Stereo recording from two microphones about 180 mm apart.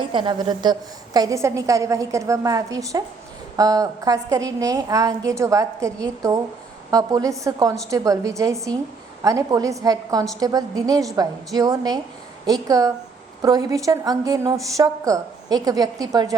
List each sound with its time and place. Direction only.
0.0 s a woman's voice: 25° right (ahead or behind)